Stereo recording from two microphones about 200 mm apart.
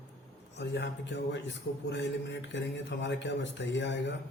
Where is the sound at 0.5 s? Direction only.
60° left (ahead or behind).